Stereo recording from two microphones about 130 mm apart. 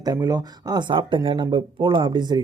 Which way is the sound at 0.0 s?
30° right (ahead or behind).